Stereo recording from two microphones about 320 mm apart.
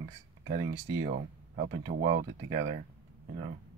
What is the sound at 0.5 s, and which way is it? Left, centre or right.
Speech, right.